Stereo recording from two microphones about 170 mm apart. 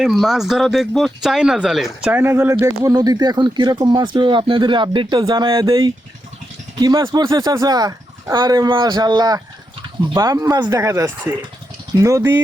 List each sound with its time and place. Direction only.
0.0 s speech: centre (ahead or behind); by 12.3 s 20° right (ahead or behind)